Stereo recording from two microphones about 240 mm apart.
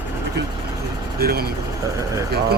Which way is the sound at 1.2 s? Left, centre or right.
Right.